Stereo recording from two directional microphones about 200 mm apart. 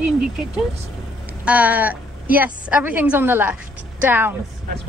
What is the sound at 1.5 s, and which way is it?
A woman's voice, 5° right (ahead or behind).